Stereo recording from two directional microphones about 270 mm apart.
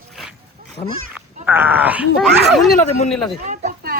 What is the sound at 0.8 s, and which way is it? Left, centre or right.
Speech, left.